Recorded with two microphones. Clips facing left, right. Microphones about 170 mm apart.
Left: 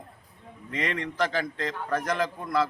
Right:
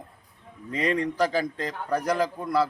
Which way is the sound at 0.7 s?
35° right (ahead or behind).